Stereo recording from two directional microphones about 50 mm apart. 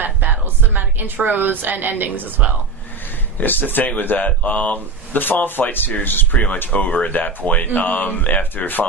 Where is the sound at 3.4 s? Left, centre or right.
Left.